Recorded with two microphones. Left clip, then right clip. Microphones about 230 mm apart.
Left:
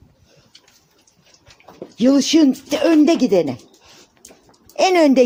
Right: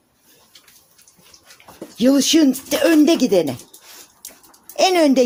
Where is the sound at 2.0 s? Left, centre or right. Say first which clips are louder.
Even; centre.